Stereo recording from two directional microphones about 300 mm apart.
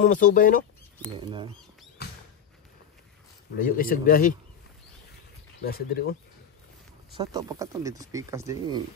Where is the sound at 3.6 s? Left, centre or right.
Left.